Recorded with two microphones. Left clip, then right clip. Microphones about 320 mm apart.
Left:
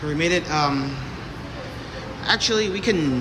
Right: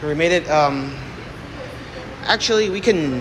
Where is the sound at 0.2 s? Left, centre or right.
Centre.